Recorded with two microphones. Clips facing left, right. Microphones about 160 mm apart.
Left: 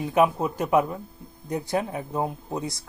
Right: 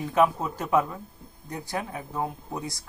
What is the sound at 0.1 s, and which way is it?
Speech, 15° left (ahead or behind).